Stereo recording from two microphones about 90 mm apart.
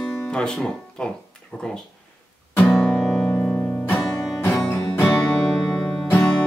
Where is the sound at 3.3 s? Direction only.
25° left (ahead or behind).